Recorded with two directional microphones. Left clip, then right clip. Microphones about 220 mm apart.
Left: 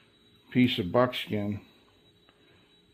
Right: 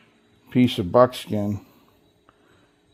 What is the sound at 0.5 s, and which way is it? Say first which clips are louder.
Speech: right 6 dB; 45° right (ahead or behind).